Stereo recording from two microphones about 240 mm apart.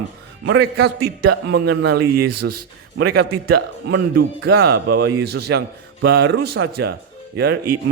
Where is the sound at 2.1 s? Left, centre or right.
Right.